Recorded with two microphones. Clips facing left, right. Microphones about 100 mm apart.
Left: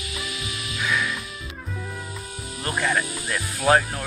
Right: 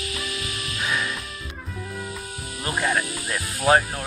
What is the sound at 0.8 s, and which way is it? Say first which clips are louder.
Music: left 2 dB; 25° right (ahead or behind).